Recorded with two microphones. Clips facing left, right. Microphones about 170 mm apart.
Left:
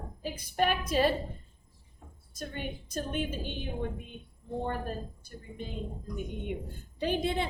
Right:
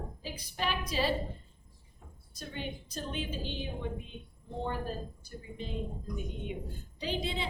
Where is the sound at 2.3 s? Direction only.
50° left (ahead or behind).